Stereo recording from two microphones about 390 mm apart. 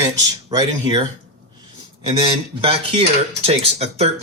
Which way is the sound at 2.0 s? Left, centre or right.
Centre.